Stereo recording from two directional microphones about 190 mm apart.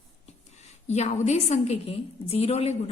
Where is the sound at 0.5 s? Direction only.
35° left (ahead or behind).